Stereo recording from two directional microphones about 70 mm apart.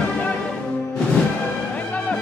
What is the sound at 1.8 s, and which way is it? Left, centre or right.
Music, left.